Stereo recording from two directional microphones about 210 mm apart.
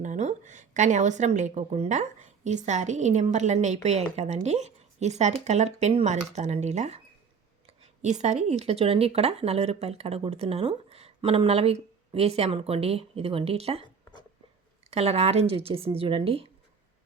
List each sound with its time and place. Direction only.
0.0 s a woman's voice: 35° right (ahead or behind)
14.8 s speech: 30° right (ahead or behind)